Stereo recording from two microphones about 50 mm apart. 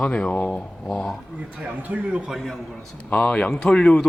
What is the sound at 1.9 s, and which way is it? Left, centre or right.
Speech, right.